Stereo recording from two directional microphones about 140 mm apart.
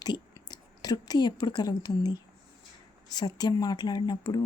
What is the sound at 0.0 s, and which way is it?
Speech, 30° left (ahead or behind).